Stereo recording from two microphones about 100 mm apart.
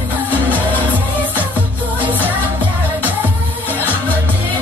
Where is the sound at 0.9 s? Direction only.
15° right (ahead or behind).